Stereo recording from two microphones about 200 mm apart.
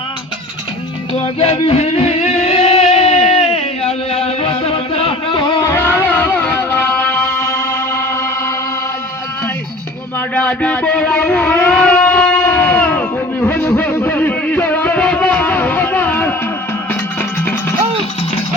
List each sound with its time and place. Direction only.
1.2 s music: 30° left (ahead or behind); by 8.5 s 15° left (ahead or behind)
10.3 s a sound: 5° left (ahead or behind)
16.9 s music: 10° left (ahead or behind)